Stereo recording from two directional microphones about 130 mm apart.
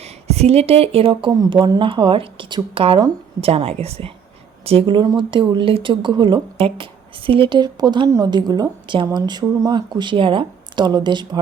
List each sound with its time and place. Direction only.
0.0 s speech: 55° right (ahead or behind)
1.3 s speech: 30° right (ahead or behind)